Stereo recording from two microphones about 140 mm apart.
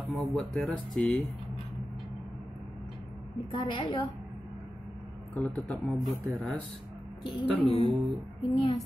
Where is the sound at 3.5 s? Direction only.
35° left (ahead or behind).